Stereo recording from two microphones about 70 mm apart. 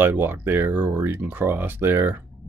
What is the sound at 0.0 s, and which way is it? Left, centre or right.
Speech, right.